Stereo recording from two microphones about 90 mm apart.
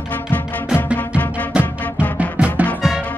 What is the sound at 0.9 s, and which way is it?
Music, 20° left (ahead or behind).